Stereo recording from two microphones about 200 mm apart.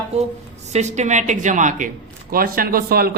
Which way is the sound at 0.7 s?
35° right (ahead or behind).